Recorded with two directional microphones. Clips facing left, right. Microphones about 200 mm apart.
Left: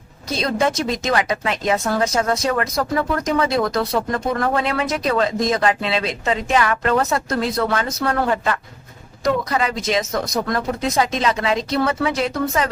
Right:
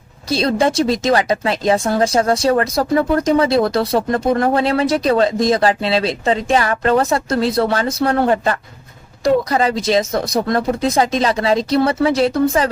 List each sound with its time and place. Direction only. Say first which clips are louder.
0.3 s speech: right 4 dB; 35° right (ahead or behind)